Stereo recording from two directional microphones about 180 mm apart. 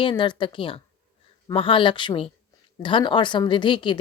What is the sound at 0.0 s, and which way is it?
A woman's voice, 25° left (ahead or behind).